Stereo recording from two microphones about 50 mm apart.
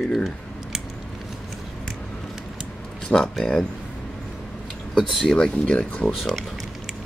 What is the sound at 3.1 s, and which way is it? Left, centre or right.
Speech, centre.